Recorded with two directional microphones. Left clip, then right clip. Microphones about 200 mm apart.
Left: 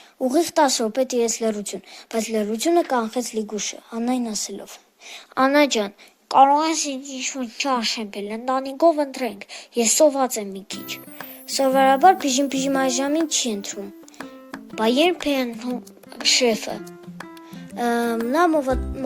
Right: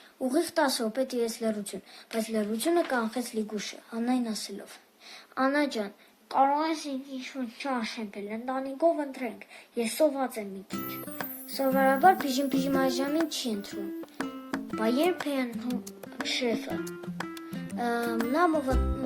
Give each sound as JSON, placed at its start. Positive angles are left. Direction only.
{"t": 0.2, "sound": "a woman's voice", "side_deg": 35}
{"t": 11.5, "sound": "a woman's voice", "side_deg": 45}
{"t": 14.2, "sound": "music", "side_deg": 0}
{"t": 14.8, "sound": "a woman's voice", "side_deg": 45}
{"t": 16.4, "sound": "a woman's voice", "side_deg": 45}
{"t": 17.7, "sound": "speech", "side_deg": 40}